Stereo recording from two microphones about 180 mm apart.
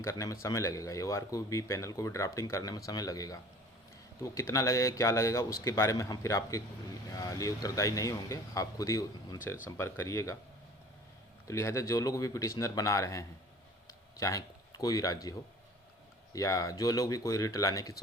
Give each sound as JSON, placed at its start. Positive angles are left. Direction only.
{"t": 0.0, "sound": "speech", "side_deg": 15}
{"t": 11.4, "sound": "speech", "side_deg": 15}